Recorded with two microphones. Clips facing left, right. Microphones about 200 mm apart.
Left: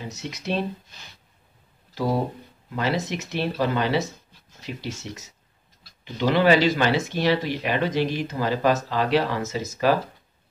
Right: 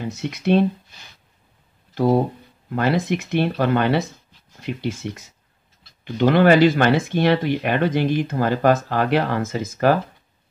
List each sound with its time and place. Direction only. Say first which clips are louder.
0.1 s speech: right 10 dB; 55° right (ahead or behind)
2.7 s speech: right 5 dB; 55° right (ahead or behind)